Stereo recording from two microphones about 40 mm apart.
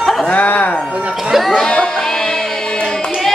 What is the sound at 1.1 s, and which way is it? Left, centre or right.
Crowd, centre.